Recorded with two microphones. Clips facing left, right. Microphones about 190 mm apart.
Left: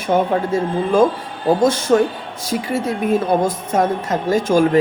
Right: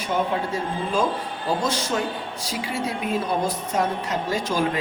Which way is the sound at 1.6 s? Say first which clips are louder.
Left 10 dB; 55° left (ahead or behind).